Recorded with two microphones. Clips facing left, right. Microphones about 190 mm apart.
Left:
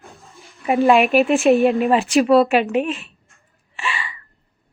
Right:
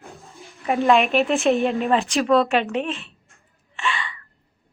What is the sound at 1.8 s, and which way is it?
Speech, 15° left (ahead or behind).